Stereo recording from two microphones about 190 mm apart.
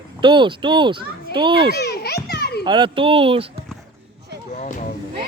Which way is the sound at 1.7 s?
55° left (ahead or behind).